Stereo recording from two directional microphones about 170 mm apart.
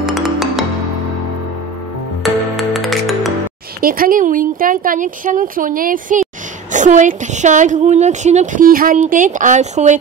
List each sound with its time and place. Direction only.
0.0 s music: centre (ahead or behind)
2.2 s music: centre (ahead or behind)
3.8 s a woman's voice: 55° right (ahead or behind)